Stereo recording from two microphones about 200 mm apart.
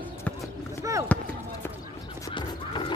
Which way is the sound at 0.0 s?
10° left (ahead or behind).